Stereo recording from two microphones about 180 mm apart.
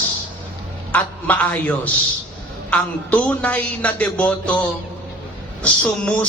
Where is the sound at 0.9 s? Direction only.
10° left (ahead or behind).